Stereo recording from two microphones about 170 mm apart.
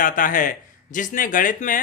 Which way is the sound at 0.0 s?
55° left (ahead or behind).